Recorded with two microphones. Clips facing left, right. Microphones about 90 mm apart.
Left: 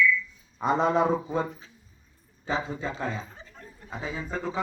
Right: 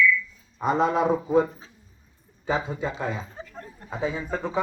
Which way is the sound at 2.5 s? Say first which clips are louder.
Right 3 dB; 15° right (ahead or behind).